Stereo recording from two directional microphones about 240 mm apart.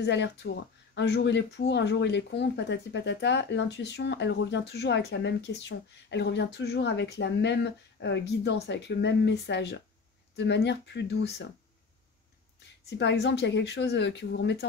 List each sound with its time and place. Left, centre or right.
0.0 s speech: left
12.9 s speech: left